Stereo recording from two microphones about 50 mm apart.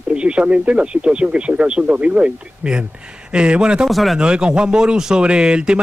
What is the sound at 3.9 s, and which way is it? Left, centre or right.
Speech, centre.